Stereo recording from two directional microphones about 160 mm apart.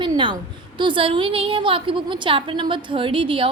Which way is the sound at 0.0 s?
30° right (ahead or behind).